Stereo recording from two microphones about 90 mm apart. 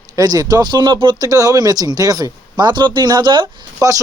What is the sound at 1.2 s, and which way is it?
Speech, 40° right (ahead or behind).